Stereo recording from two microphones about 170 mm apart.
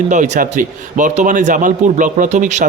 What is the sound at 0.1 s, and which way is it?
A man's voice, 50° right (ahead or behind).